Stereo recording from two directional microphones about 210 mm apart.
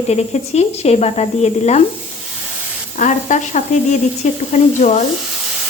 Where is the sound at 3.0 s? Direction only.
35° left (ahead or behind).